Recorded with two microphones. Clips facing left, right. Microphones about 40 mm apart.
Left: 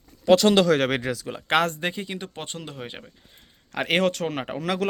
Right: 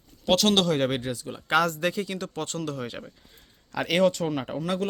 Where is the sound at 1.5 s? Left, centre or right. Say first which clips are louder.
Left 1 dB; left.